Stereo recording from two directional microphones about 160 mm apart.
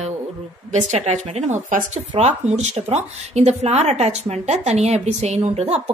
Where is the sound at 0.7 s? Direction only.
45° right (ahead or behind).